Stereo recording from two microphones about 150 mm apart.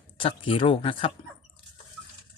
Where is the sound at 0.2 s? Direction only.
35° left (ahead or behind).